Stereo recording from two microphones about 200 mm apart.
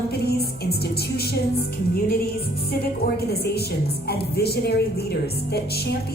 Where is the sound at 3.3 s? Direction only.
50° left (ahead or behind).